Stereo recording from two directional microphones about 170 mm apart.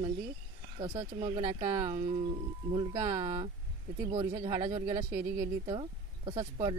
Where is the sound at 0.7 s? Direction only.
30° right (ahead or behind).